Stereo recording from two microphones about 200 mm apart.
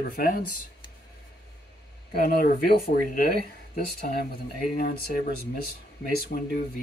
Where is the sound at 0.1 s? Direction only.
45° left (ahead or behind).